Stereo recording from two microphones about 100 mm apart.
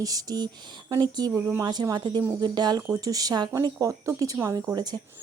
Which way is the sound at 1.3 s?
25° right (ahead or behind).